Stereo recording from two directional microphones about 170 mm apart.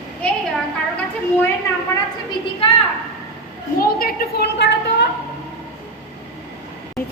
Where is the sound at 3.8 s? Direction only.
60° left (ahead or behind).